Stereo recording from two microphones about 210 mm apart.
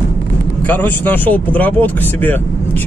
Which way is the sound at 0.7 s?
10° left (ahead or behind).